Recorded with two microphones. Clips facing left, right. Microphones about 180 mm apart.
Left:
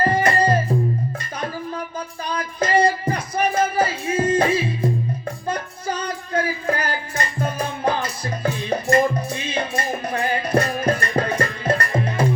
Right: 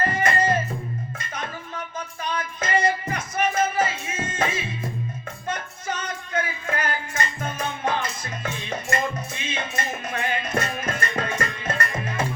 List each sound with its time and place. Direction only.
0.0 s music: 35° left (ahead or behind)
2.2 s music: 35° left (ahead or behind)